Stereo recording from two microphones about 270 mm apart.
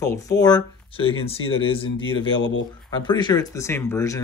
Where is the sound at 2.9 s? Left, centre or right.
Centre.